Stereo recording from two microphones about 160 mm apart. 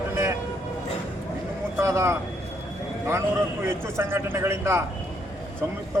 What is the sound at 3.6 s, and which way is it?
Speech, 15° right (ahead or behind).